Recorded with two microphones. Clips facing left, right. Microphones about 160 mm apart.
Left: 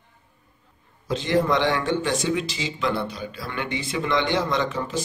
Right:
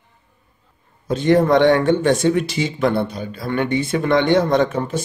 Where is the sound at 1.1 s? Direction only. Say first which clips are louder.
Right 7 dB; 55° right (ahead or behind).